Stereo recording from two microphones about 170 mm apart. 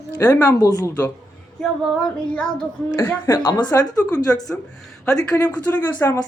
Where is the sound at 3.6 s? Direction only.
25° left (ahead or behind).